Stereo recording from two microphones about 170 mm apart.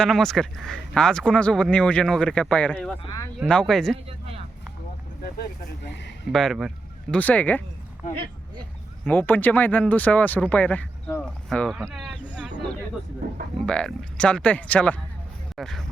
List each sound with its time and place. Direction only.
0.0 s speech: 5° left (ahead or behind)
3.0 s speech: 25° left (ahead or behind)
3.4 s speech: 5° left (ahead or behind)
5.2 s speech: 80° left
6.3 s speech: centre (ahead or behind)
7.2 s speech: 10° left (ahead or behind)
9.0 s speech: 10° left (ahead or behind)
13.7 s speech: 5° left (ahead or behind)